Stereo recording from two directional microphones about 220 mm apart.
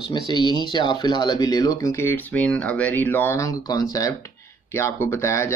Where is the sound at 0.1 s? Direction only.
20° left (ahead or behind).